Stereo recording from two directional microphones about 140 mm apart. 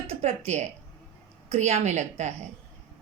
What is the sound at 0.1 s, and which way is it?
A woman's voice, 50° right (ahead or behind).